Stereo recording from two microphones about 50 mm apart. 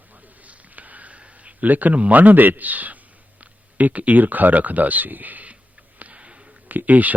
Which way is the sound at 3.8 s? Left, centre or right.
Right.